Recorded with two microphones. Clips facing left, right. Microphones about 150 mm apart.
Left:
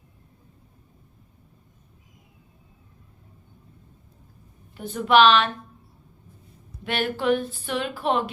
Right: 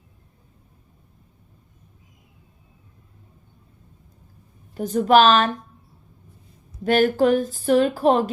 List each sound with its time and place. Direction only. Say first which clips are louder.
4.7 s speech: right 4 dB; 40° right (ahead or behind)
6.8 s speech: right 7 dB; 40° right (ahead or behind)